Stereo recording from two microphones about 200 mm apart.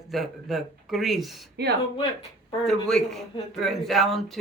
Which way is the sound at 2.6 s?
Centre (ahead or behind).